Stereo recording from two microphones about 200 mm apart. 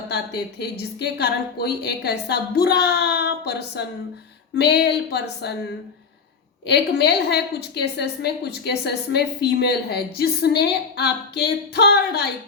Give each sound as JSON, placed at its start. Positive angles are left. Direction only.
{"t": 0.1, "sound": "a woman's voice", "side_deg": 55}
{"t": 6.7, "sound": "a woman's voice", "side_deg": 55}